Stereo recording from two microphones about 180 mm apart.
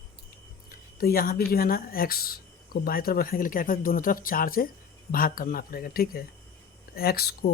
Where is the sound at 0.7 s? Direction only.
55° left (ahead or behind).